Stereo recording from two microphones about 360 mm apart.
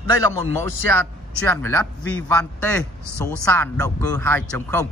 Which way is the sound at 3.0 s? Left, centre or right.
Left.